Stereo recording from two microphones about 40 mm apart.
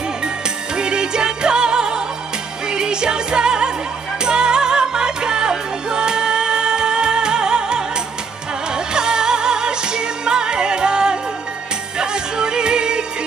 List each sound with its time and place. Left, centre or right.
0.7 s music: right